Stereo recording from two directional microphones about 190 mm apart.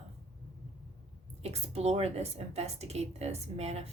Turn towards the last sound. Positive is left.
turn(degrees=-35)  # may be behind; listen again after turning